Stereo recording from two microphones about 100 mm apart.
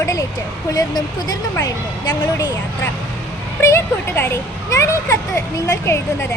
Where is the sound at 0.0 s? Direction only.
35° left (ahead or behind).